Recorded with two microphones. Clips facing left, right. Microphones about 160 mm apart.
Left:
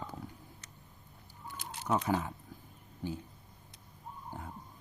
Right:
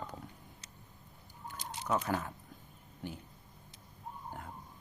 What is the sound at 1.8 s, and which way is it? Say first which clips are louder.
Speech: left 2 dB; 10° left (ahead or behind).